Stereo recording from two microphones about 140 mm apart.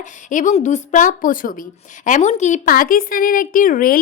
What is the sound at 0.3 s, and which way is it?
A woman's voice, 60° left (ahead or behind).